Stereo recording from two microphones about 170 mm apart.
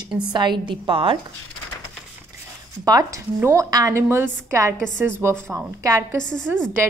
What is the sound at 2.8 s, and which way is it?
A woman's voice, 20° right (ahead or behind).